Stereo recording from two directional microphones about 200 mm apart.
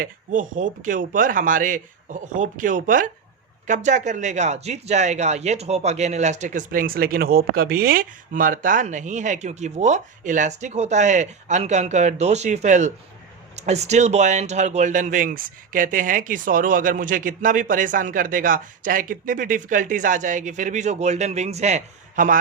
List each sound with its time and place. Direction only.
0.0 s speech: 40° right (ahead or behind)